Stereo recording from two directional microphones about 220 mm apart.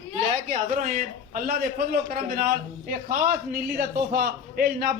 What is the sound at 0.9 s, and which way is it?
A man's voice, 40° right (ahead or behind).